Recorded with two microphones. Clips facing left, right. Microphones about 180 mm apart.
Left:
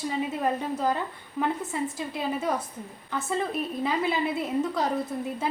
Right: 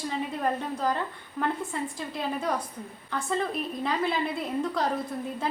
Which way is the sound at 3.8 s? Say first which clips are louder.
Left 1 dB; 5° left (ahead or behind).